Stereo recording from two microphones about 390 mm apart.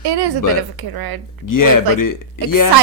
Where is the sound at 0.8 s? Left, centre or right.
Right.